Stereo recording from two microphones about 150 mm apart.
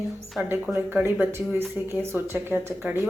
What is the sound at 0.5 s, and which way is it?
Speech, 15° right (ahead or behind).